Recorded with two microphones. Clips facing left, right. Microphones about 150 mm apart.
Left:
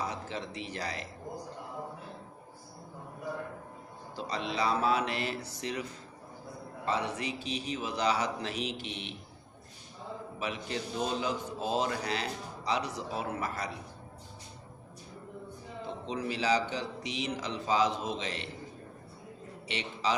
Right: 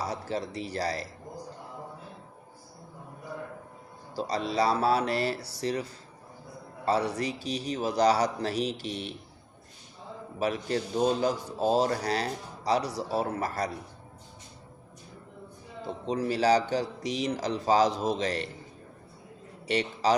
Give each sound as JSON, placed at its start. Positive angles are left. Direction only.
{"t": 0.0, "sound": "a man's voice", "side_deg": -35}
{"t": 4.1, "sound": "a man's voice", "side_deg": -40}
{"t": 10.4, "sound": "a man's voice", "side_deg": -40}
{"t": 16.0, "sound": "a man's voice", "side_deg": -40}
{"t": 19.6, "sound": "a man's voice", "side_deg": -40}